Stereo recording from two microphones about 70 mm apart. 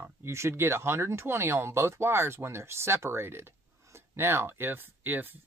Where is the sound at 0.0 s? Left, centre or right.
Right.